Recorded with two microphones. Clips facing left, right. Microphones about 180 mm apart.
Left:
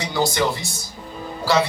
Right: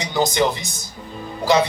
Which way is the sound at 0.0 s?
20° right (ahead or behind).